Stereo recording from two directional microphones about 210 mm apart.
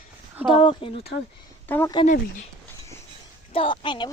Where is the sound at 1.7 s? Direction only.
10° left (ahead or behind).